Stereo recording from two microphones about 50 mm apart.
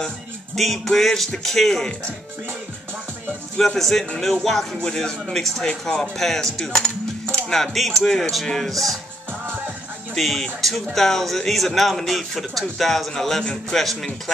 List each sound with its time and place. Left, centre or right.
0.6 s speech: centre
3.5 s speech: centre
6.6 s coin: centre
10.1 s speech: centre
13.4 s speech: centre
13.7 s speech: centre